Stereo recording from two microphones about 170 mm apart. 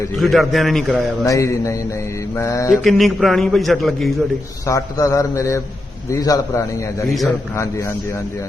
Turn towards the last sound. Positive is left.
turn(degrees=20)  # may be behind; listen again after turning